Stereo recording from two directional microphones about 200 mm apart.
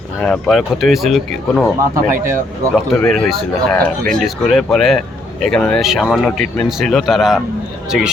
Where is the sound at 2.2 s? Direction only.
10° right (ahead or behind).